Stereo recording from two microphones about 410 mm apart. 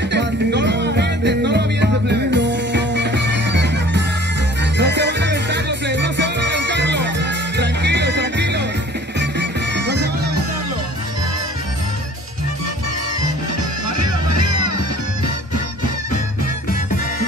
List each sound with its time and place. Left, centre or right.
0.1 s music: right